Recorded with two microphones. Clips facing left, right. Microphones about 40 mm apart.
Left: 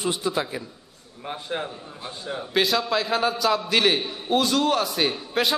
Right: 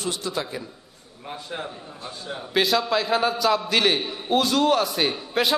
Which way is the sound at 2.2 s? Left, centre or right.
Centre.